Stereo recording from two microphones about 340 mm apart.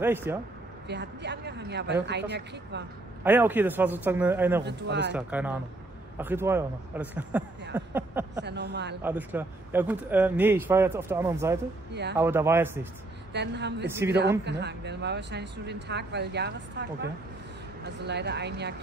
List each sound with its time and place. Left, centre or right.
0.0 s speech: centre
0.8 s speech: right
3.3 s a man's voice: centre
4.6 s speech: right
5.1 s a man's voice: centre
7.7 s a sound: centre
8.5 s speech: right
9.0 s speech: centre
11.9 s speech: right
12.2 s speech: centre
13.3 s speech: right
13.8 s speech: centre
14.4 s speech: right